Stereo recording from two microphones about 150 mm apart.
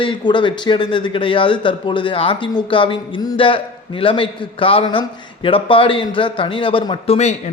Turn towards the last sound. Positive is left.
turn(degrees=45)  # may be behind; listen again after turning